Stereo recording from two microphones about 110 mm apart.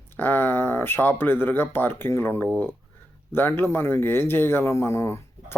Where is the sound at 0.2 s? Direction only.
20° left (ahead or behind).